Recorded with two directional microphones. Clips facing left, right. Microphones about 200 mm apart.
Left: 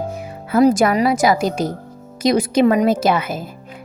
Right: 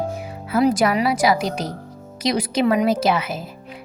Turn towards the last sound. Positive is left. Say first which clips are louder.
# left 2 dB
turn(degrees=50)  # may be behind; listen again after turning